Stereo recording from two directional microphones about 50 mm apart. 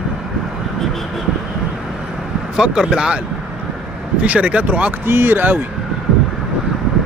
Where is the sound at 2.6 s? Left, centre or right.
Centre.